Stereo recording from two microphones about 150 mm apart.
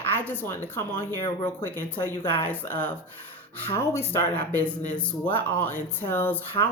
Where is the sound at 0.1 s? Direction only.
15° left (ahead or behind).